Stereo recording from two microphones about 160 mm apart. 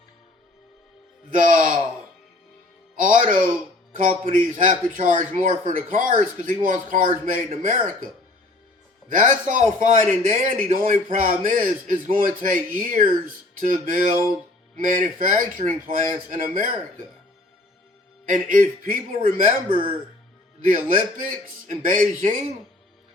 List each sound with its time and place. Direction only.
1.3 s speech: 55° right (ahead or behind)
2.9 s music: 55° right (ahead or behind)
3.9 s a man's voice: 60° right (ahead or behind)
18.3 s speech: 55° right (ahead or behind)
19.6 s speech: 35° right (ahead or behind)
21.8 s speech: 55° right (ahead or behind)